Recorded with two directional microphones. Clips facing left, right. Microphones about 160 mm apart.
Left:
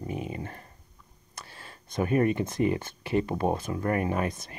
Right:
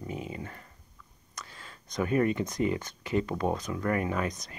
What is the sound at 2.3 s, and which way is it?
Speech, 25° left (ahead or behind).